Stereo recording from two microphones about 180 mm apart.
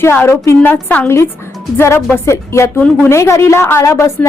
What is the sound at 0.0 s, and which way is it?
A woman's voice, 15° left (ahead or behind).